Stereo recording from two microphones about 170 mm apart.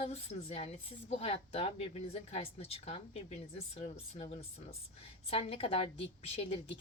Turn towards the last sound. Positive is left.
turn(degrees=35)  # may be behind; listen again after turning